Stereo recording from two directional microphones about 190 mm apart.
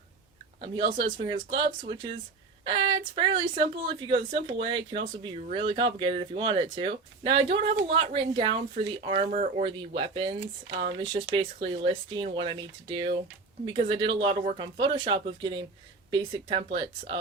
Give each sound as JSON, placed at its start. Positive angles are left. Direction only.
{"t": 0.6, "sound": "speech", "side_deg": -25}
{"t": 9.6, "sound": "speech", "side_deg": -25}